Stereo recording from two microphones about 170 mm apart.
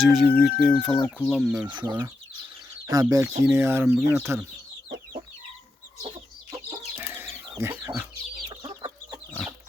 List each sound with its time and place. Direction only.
0.0 s speech: centre (ahead or behind)
1.6 s speech: 25° right (ahead or behind)
6.9 s chicken: 10° right (ahead or behind)
8.4 s chicken: 30° right (ahead or behind)